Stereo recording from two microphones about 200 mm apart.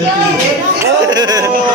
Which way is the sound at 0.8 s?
20° right (ahead or behind).